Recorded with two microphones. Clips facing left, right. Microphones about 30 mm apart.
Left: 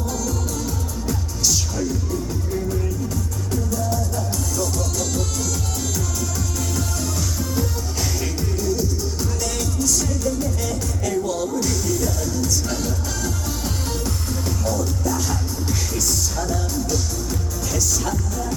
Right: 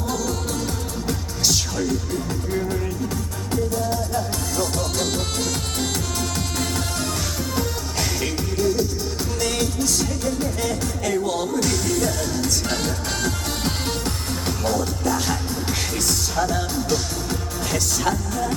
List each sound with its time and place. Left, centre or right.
0.1 s music: right
3.5 s music: right
7.5 s music: right
11.5 s music: right